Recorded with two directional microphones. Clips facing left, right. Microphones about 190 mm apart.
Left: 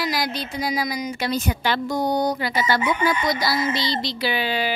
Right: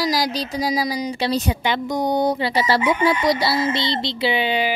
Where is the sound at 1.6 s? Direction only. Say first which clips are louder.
Left 1 dB; 20° right (ahead or behind).